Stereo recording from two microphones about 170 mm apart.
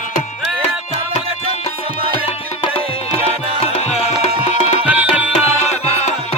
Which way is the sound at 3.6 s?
40° left (ahead or behind).